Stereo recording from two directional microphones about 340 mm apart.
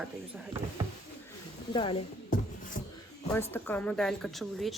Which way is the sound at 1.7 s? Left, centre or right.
Centre.